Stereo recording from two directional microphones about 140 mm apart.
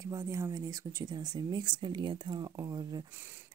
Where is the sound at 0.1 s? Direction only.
25° right (ahead or behind).